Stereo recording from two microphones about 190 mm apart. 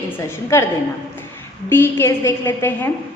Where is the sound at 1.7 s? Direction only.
10° left (ahead or behind).